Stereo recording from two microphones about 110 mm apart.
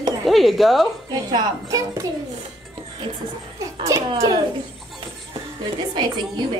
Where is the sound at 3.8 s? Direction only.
35° right (ahead or behind).